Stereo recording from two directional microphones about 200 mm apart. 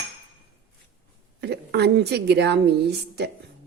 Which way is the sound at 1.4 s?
55° right (ahead or behind).